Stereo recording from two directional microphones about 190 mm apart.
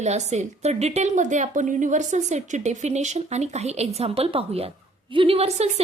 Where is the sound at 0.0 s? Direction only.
35° right (ahead or behind).